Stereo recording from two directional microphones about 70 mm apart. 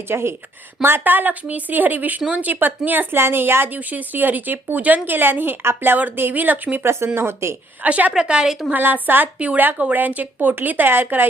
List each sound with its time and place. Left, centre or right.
0.1 s speech: right
7.8 s a woman's voice: right
8.7 s speech: right